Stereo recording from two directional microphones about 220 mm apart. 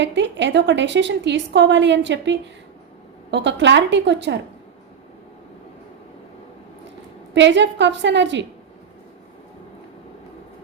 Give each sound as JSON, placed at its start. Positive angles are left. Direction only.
{"t": 0.0, "sound": "a woman's voice", "side_deg": -55}
{"t": 7.3, "sound": "a woman's voice", "side_deg": -55}